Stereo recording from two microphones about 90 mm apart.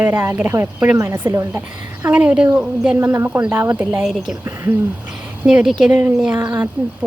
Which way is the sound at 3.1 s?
25° right (ahead or behind).